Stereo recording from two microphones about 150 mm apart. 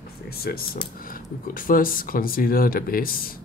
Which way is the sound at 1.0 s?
70° left (ahead or behind).